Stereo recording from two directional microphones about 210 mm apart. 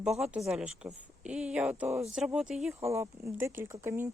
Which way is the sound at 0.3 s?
Centre (ahead or behind).